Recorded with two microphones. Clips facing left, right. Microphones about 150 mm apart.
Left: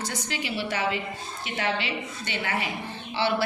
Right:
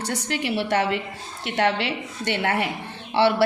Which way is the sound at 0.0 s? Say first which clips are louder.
Right 5 dB; 65° right (ahead or behind).